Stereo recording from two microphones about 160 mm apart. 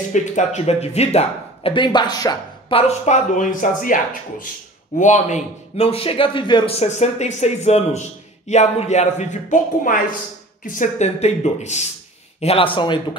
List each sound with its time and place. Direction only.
0.1 s speech: 45° left (ahead or behind); by 2.8 s 25° left (ahead or behind)
3.1 s speech: 50° left (ahead or behind); by 6.7 s 30° left (ahead or behind)
6.8 s speech: 45° left (ahead or behind)